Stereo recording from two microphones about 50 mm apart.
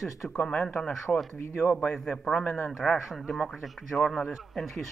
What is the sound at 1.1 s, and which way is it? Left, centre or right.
Speech, centre.